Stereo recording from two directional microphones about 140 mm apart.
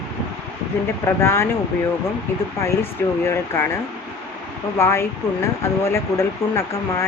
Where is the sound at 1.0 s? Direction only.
20° left (ahead or behind).